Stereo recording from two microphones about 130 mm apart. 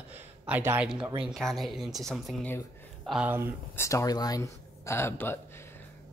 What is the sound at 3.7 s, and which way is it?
Speech, 25° left (ahead or behind).